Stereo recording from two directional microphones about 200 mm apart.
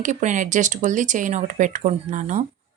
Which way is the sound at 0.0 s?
40° right (ahead or behind).